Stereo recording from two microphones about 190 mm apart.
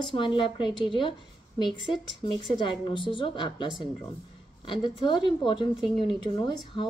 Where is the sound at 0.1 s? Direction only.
25° left (ahead or behind).